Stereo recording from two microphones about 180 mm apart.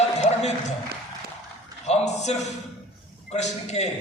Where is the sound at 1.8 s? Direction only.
40° left (ahead or behind).